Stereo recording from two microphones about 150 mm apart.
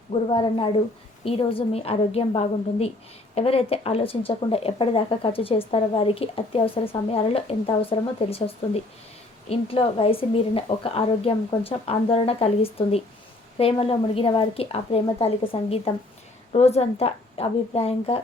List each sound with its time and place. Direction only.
0.1 s speech: 35° left (ahead or behind)